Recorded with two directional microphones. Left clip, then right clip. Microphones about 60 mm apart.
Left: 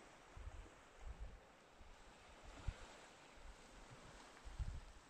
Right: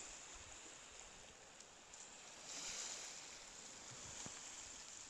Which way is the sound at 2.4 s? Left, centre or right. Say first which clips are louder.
Right 11 dB; right.